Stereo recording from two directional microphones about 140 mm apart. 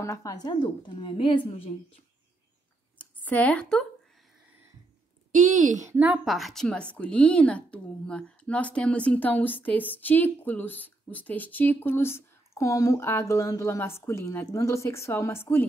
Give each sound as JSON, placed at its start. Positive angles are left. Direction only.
{"t": 0.0, "sound": "a woman's voice", "side_deg": 20}
{"t": 3.0, "sound": "speech", "side_deg": 10}
{"t": 5.5, "sound": "a woman's voice", "side_deg": -65}
{"t": 5.8, "sound": "a woman's voice", "side_deg": -15}
{"t": 6.2, "sound": "speech", "side_deg": 0}